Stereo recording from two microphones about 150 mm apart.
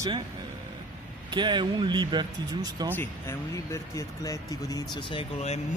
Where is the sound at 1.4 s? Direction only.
30° right (ahead or behind).